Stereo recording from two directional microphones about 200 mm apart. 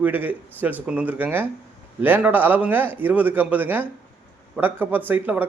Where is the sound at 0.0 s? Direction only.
10° right (ahead or behind).